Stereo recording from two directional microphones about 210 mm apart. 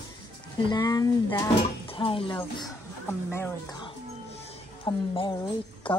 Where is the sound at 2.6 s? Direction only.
10° left (ahead or behind).